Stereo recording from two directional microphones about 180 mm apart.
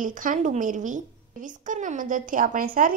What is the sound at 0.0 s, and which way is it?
A woman's voice, 45° right (ahead or behind).